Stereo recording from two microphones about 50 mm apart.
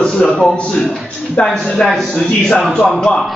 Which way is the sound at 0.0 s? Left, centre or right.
Centre.